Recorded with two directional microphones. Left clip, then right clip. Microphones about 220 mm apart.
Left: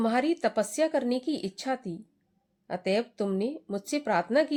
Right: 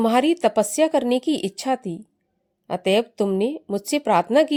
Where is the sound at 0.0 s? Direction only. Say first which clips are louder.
Right 8 dB; 30° right (ahead or behind).